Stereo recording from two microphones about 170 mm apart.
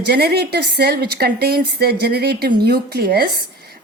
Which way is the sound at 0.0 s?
70° right (ahead or behind).